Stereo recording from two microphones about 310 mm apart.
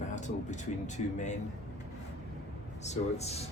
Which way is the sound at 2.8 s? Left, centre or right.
Left.